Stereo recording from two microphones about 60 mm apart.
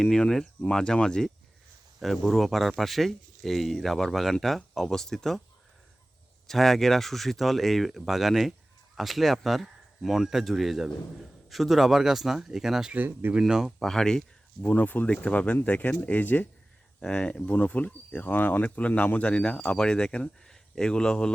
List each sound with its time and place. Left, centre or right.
0.0 s speech: centre
2.0 s speech: centre
6.5 s speech: centre
12.9 s speech: right
13.5 s speech: centre
13.7 s speech: centre
14.6 s speech: left
17.0 s speech: centre